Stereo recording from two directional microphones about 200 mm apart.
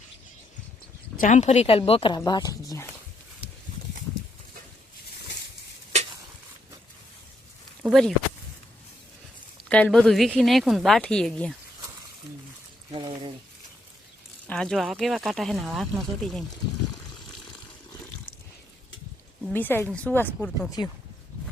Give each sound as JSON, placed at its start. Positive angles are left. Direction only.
{"t": 1.2, "sound": "a woman's voice", "side_deg": 35}
{"t": 7.9, "sound": "speech", "side_deg": 5}
{"t": 9.6, "sound": "speech", "side_deg": 5}
{"t": 12.9, "sound": "speech", "side_deg": -25}
{"t": 14.4, "sound": "speech", "side_deg": 5}
{"t": 19.5, "sound": "speech", "side_deg": 10}
{"t": 20.8, "sound": "a woman's voice", "side_deg": 20}